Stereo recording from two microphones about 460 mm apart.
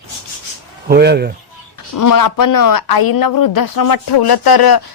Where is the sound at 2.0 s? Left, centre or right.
Left.